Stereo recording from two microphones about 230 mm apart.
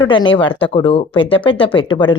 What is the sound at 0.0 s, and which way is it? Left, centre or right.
Speech, left.